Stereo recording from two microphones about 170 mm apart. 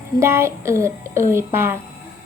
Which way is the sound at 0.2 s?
15° right (ahead or behind).